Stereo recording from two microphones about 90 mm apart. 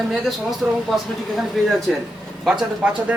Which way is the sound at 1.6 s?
5° left (ahead or behind).